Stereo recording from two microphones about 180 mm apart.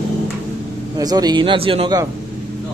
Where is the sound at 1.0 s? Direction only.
20° right (ahead or behind).